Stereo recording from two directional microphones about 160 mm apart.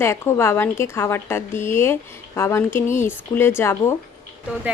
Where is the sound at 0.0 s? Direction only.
15° left (ahead or behind).